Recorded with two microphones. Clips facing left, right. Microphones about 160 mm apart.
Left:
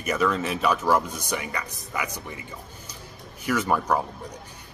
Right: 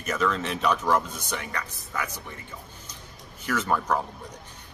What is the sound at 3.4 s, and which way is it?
Speech, 10° left (ahead or behind).